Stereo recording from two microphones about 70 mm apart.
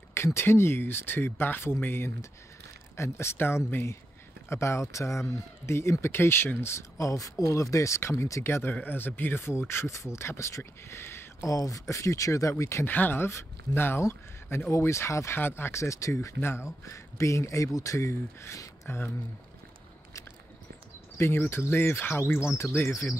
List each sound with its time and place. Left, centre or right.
0.1 s speech: left
11.4 s speech: left
12.8 s speech: left
15.3 s speech: left
21.2 s speech: left